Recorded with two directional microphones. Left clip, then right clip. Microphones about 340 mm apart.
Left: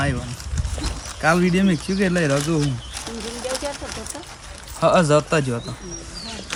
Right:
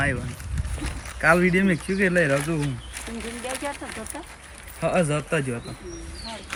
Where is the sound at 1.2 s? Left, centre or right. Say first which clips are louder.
Even; centre.